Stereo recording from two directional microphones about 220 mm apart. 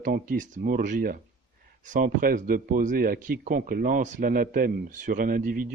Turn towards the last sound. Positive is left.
turn(degrees=-40)  # may be behind; listen again after turning